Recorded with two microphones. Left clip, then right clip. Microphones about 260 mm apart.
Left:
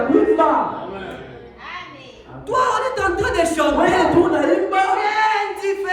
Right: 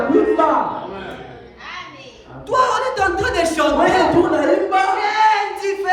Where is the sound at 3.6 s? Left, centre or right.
Centre.